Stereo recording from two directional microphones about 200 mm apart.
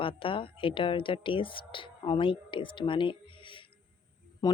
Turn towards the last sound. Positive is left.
turn(degrees=20)  # may be behind; listen again after turning